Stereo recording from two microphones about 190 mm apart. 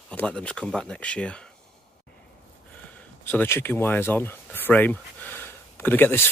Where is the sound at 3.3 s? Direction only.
10° left (ahead or behind).